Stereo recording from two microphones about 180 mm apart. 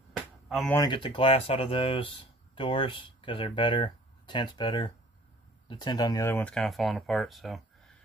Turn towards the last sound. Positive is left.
turn(degrees=0)  # may be behind; listen again after turning